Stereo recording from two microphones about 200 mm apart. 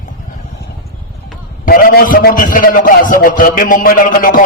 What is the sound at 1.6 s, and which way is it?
A man's voice, 45° left (ahead or behind).